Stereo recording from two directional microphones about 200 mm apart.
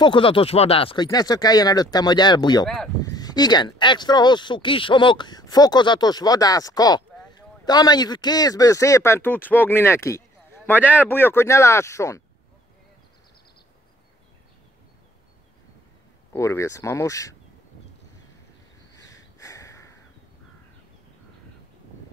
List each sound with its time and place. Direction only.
0.0 s speech: 25° left (ahead or behind)
2.6 s speech: 5° left (ahead or behind)
3.0 s speech: 20° left (ahead or behind)
16.3 s speech: 15° left (ahead or behind)
18.9 s snort: 15° left (ahead or behind)